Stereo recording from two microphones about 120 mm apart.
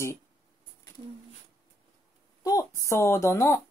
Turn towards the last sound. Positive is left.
turn(degrees=20)  # may be behind; listen again after turning